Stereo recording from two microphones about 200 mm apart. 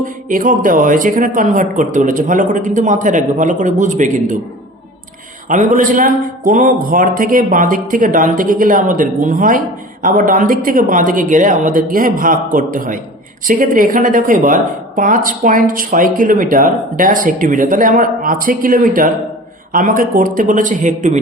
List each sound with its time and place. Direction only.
0.3 s speech: 40° right (ahead or behind)
5.5 s a man's voice: 40° right (ahead or behind)